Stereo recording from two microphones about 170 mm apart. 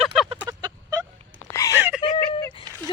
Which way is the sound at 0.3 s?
20° right (ahead or behind).